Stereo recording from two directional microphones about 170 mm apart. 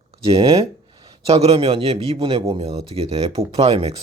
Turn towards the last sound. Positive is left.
turn(degrees=-35)  # may be behind; listen again after turning